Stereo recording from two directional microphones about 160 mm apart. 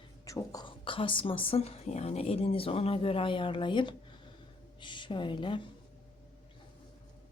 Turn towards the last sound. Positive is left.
turn(degrees=30)  # may be behind; listen again after turning